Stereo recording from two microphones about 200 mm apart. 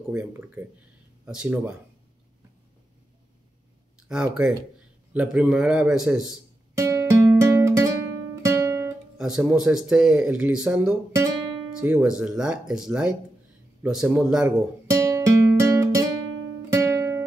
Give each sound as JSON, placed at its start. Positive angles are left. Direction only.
{"t": 0.1, "sound": "speech", "side_deg": -10}
{"t": 4.1, "sound": "speech", "side_deg": -5}
{"t": 6.8, "sound": "music", "side_deg": -15}
{"t": 8.5, "sound": "guitar", "side_deg": -15}
{"t": 9.2, "sound": "speech", "side_deg": -5}
{"t": 14.9, "sound": "music", "side_deg": -15}